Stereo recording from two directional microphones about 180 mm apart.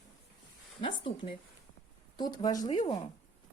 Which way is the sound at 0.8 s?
30° left (ahead or behind).